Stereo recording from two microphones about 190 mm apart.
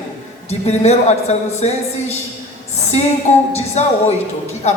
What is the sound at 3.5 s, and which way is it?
A woman's voice, 35° left (ahead or behind).